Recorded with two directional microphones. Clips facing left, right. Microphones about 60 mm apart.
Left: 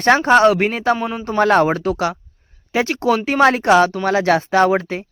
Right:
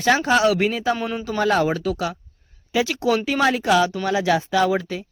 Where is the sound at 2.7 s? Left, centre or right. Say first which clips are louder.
Left 3 dB; left.